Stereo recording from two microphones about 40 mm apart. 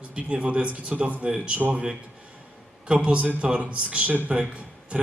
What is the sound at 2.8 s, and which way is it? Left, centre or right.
A man's voice, right.